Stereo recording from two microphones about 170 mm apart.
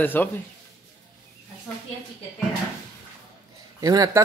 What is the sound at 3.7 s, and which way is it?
Speech, 20° right (ahead or behind).